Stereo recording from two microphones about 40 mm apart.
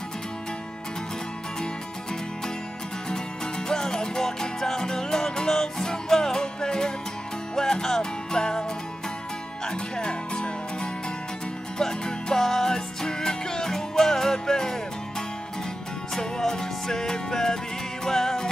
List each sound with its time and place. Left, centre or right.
3.1 s music: centre
9.7 s music: left